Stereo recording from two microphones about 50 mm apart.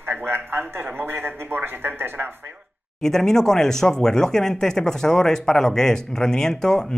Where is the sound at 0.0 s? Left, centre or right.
Right.